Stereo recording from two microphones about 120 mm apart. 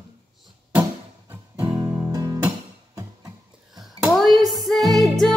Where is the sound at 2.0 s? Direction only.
25° right (ahead or behind).